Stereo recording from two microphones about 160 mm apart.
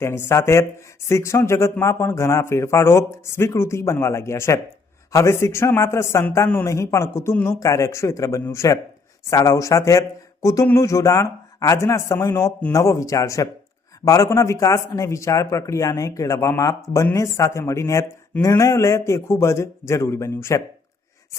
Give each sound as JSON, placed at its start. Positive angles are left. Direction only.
{"t": 0.0, "sound": "speech", "side_deg": 15}